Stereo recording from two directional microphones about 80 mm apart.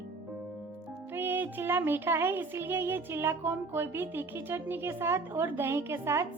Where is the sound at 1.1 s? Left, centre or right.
Right.